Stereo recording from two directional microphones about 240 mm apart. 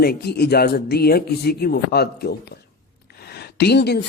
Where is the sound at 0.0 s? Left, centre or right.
Left.